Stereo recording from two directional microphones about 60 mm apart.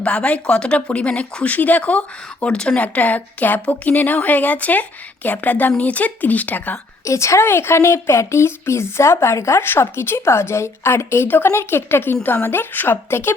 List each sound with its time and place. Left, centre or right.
0.0 s speech: left
7.0 s a woman's voice: left